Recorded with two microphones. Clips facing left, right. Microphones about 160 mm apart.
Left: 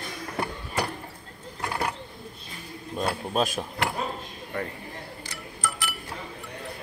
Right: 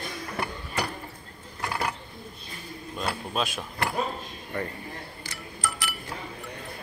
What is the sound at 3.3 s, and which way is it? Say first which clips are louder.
Speech: left 5 dB; 45° left (ahead or behind).